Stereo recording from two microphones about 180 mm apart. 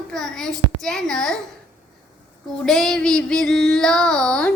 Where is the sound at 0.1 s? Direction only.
Centre (ahead or behind).